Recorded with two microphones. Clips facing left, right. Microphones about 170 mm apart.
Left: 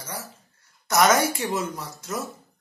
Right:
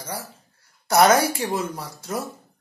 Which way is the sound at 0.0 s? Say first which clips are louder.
Right 3 dB; 30° right (ahead or behind).